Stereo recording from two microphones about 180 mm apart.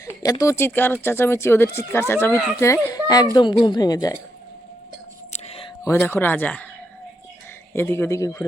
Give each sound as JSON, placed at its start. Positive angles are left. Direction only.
{"t": 0.0, "sound": "speech", "side_deg": 20}
{"t": 5.3, "sound": "whispering", "side_deg": 30}
{"t": 6.0, "sound": "speech", "side_deg": 10}
{"t": 7.7, "sound": "speech", "side_deg": 15}